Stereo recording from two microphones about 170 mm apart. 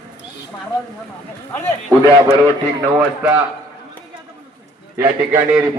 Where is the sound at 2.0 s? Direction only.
15° left (ahead or behind).